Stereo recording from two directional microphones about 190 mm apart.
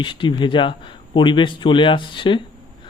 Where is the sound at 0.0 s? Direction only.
25° left (ahead or behind).